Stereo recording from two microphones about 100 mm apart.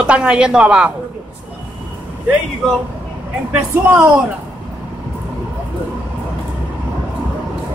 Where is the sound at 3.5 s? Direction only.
15° right (ahead or behind).